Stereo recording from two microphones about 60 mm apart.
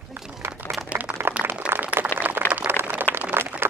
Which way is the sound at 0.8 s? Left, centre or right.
Right.